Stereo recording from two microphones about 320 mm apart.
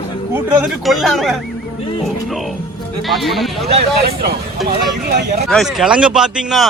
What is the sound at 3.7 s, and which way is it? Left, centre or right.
Speech, right.